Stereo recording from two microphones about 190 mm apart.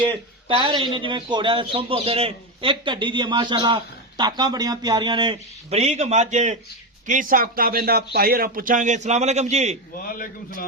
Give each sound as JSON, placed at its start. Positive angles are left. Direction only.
{"t": 0.0, "sound": "speech", "side_deg": -30}
{"t": 10.0, "sound": "a man's voice", "side_deg": 50}